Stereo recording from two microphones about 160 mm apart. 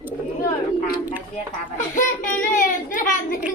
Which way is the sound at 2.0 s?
55° left (ahead or behind).